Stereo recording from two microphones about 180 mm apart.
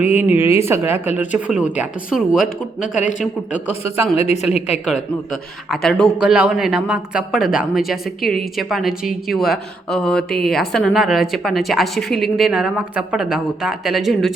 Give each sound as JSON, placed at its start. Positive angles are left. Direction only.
{"t": 0.0, "sound": "a woman's voice", "side_deg": -10}
{"t": 3.8, "sound": "speech", "side_deg": 35}
{"t": 5.3, "sound": "a woman's voice", "side_deg": 0}